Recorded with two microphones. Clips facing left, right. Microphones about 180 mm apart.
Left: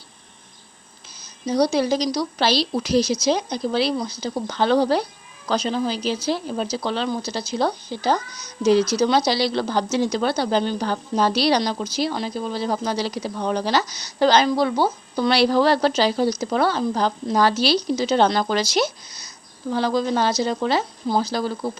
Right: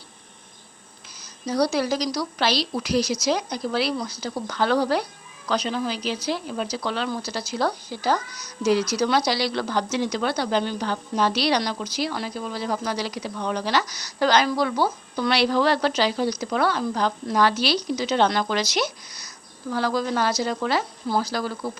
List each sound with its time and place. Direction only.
1.5 s a woman's voice: 20° left (ahead or behind)